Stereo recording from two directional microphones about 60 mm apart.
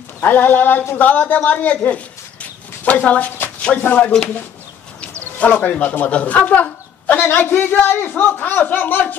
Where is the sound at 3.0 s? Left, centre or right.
Left.